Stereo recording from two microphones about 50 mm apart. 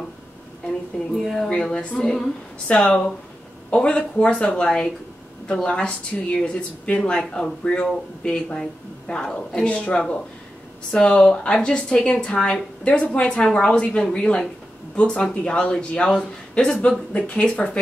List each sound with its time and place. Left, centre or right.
0.9 s speech: centre
1.5 s speech: centre